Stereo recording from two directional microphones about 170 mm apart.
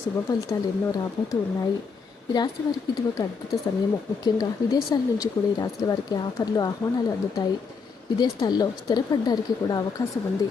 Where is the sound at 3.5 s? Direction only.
25° left (ahead or behind).